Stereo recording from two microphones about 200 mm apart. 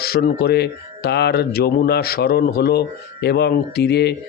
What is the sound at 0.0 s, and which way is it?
Speech, 50° left (ahead or behind).